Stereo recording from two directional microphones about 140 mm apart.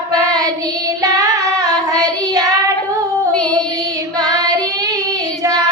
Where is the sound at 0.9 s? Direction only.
25° right (ahead or behind).